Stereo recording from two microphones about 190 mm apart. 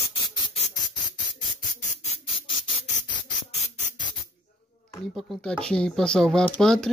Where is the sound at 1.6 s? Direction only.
40° left (ahead or behind).